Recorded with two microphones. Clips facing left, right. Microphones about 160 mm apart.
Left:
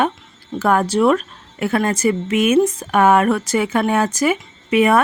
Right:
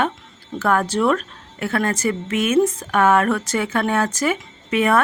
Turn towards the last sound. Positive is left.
turn(degrees=10)  # may be behind; listen again after turning